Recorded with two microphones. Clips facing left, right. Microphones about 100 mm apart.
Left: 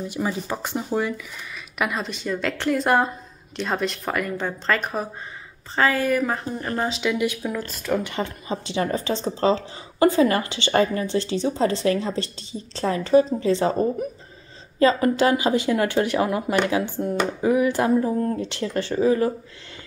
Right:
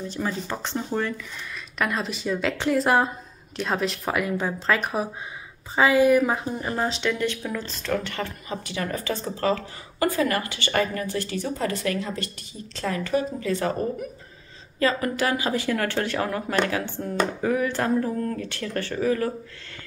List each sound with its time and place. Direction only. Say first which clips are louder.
0.0 s speech: left 2 dB; 10° left (ahead or behind)